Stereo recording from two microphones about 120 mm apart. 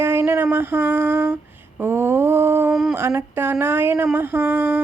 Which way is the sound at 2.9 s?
20° right (ahead or behind).